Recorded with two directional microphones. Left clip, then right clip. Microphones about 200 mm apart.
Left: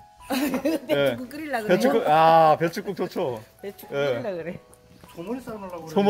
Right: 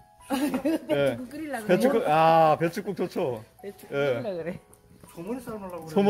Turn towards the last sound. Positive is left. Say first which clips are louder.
# left 2 dB
turn(degrees=0)  # may be behind; listen again after turning